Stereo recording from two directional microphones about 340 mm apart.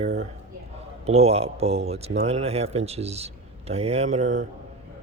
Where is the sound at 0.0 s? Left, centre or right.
Centre.